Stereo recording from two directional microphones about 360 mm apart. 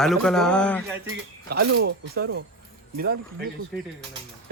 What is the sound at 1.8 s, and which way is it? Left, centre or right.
Speech, right.